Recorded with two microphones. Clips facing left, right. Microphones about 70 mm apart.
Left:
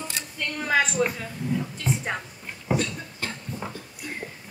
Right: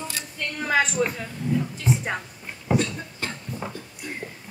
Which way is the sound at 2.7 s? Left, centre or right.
Centre.